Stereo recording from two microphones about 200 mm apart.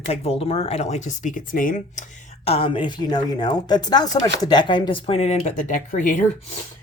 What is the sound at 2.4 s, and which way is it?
A woman's voice, 30° left (ahead or behind).